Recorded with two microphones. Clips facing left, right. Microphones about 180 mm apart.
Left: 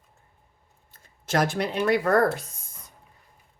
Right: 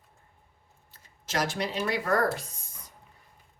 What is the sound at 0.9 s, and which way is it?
Speech, 55° left (ahead or behind).